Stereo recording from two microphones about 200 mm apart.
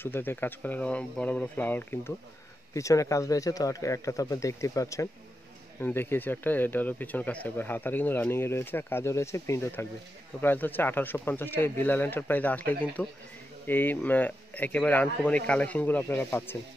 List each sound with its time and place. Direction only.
0.0 s speech: 10° left (ahead or behind)